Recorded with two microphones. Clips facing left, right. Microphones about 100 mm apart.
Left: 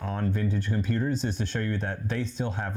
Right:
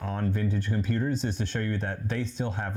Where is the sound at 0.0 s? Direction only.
25° left (ahead or behind).